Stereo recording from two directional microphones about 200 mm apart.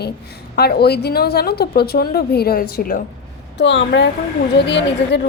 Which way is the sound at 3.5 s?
65° left (ahead or behind).